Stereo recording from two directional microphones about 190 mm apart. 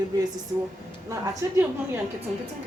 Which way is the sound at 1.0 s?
15° right (ahead or behind).